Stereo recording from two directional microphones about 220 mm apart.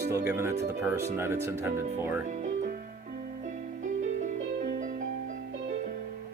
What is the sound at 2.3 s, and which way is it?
Music, 35° right (ahead or behind).